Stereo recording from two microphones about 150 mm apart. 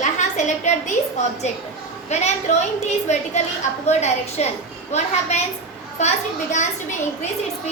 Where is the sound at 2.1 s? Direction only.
50° left (ahead or behind).